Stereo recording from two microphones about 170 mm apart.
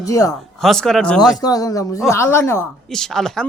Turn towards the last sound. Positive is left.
turn(degrees=5)  # may be behind; listen again after turning